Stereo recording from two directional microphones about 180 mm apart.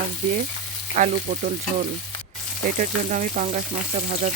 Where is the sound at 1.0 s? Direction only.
50° right (ahead or behind).